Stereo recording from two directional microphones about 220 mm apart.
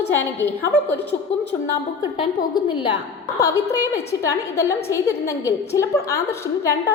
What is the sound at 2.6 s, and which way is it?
A woman's voice, 20° left (ahead or behind).